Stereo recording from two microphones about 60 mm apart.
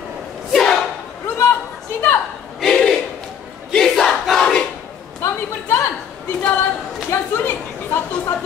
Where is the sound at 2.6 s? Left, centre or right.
Centre.